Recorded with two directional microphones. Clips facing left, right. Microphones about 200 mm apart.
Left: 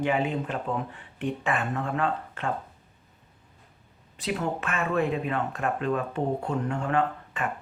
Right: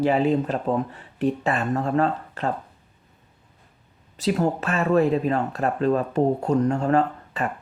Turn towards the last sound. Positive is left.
turn(degrees=-40)  # may be behind; listen again after turning